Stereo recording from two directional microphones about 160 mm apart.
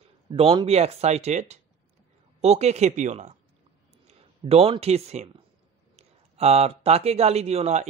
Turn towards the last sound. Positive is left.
turn(degrees=-45)  # may be behind; listen again after turning